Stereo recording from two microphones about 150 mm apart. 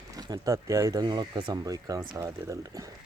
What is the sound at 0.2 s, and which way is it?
Speech, 25° right (ahead or behind).